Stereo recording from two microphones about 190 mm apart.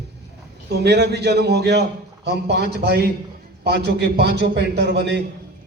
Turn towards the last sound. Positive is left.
turn(degrees=-60)  # may be behind; listen again after turning